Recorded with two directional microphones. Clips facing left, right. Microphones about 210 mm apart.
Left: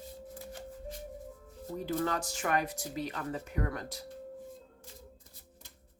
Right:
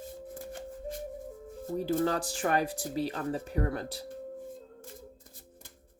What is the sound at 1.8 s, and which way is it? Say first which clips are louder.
Speech: right 4 dB; 30° right (ahead or behind).